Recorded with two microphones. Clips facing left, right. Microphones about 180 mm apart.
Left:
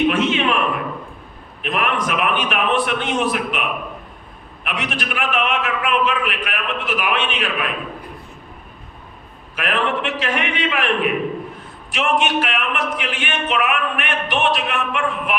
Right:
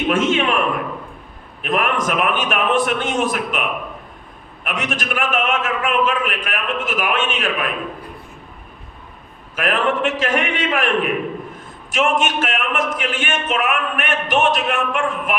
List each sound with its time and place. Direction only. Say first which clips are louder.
0.1 s a man's voice: right 1 dB; 45° right (ahead or behind)
1.6 s a man's voice: right 2 dB; 45° right (ahead or behind)
4.6 s a man's voice: right 1 dB; 45° right (ahead or behind)
9.6 s a man's voice: right 2 dB; 45° right (ahead or behind)